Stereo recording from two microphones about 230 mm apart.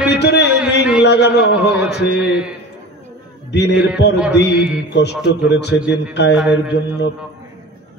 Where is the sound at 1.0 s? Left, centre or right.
Left.